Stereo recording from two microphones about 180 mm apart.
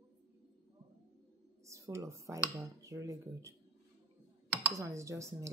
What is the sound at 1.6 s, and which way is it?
A woman's voice, 15° right (ahead or behind).